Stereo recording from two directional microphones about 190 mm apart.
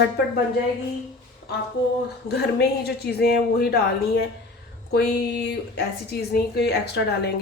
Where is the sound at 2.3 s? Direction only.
60° left (ahead or behind).